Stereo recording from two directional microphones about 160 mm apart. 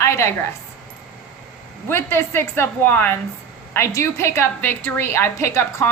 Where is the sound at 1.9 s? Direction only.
15° left (ahead or behind).